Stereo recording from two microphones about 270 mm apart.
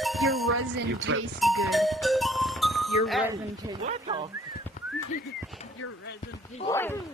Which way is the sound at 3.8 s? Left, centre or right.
Right.